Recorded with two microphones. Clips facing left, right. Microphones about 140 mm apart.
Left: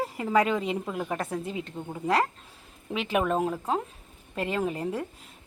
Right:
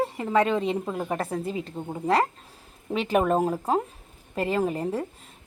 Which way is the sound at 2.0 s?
Centre (ahead or behind).